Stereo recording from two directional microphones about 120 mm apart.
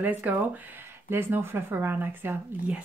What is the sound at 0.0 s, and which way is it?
Speech, 15° right (ahead or behind).